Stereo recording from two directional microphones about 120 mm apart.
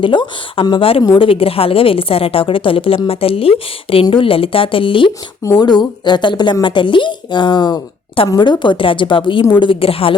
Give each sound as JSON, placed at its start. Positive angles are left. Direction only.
{"t": 0.0, "sound": "a woman's voice", "side_deg": 45}
{"t": 5.4, "sound": "a woman's voice", "side_deg": 30}